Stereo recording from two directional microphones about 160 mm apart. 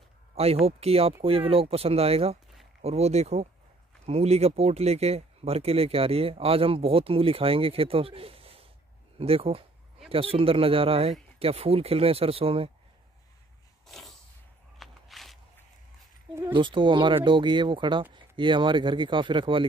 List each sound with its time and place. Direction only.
0.7 s speech: 40° right (ahead or behind)
13.8 s a sound: centre (ahead or behind)
14.8 s walk: centre (ahead or behind)
16.5 s speech: 30° right (ahead or behind)